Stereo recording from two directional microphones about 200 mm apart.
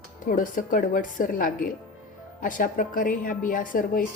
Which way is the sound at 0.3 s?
40° left (ahead or behind).